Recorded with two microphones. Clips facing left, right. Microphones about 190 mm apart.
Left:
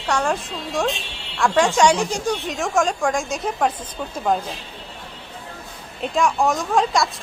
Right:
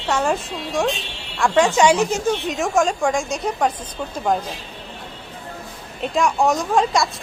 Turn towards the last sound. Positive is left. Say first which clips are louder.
# right 1 dB
turn(degrees=0)  # may be behind; listen again after turning